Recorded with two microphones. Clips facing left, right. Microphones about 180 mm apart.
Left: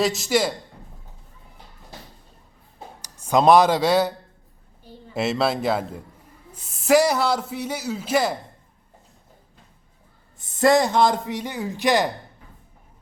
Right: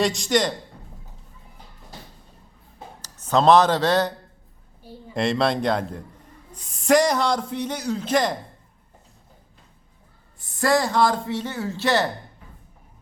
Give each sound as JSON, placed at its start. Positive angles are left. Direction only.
{"t": 0.0, "sound": "a man's voice", "side_deg": 5}
{"t": 3.0, "sound": "speech", "side_deg": 10}
{"t": 5.1, "sound": "a man's voice", "side_deg": 5}
{"t": 10.3, "sound": "a man's voice", "side_deg": 20}